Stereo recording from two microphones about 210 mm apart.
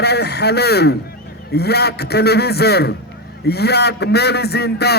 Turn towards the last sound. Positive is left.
turn(degrees=50)  # may be behind; listen again after turning